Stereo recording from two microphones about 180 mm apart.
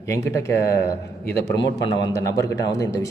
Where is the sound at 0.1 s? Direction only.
15° left (ahead or behind).